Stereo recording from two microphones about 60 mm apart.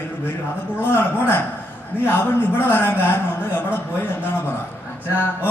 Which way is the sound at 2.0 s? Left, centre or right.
Left.